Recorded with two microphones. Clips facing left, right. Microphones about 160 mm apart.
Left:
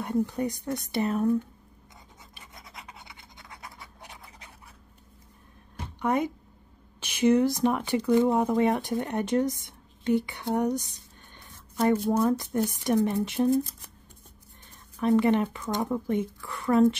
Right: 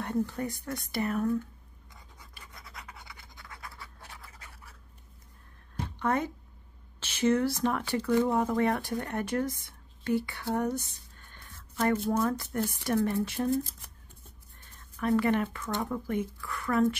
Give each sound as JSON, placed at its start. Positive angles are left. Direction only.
{"t": 0.2, "sound": "speech", "side_deg": 15}
{"t": 2.3, "sound": "scratch", "side_deg": 20}
{"t": 5.9, "sound": "speech", "side_deg": 15}
{"t": 14.7, "sound": "speech", "side_deg": 20}